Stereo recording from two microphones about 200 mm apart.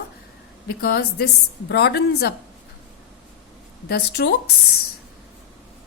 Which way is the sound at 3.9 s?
55° left (ahead or behind).